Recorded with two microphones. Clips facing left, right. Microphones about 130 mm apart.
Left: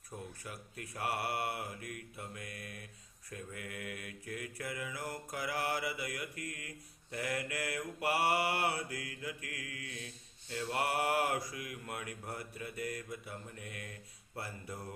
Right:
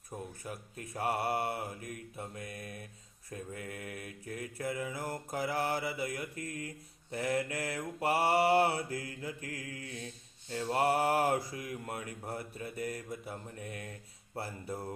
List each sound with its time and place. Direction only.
0.4 s mantra: 25° right (ahead or behind)